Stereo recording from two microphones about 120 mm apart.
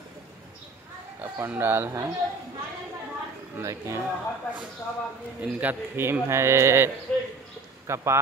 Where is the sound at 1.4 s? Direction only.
15° right (ahead or behind).